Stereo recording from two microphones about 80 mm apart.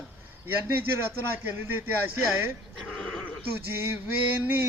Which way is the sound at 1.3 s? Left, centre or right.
Right.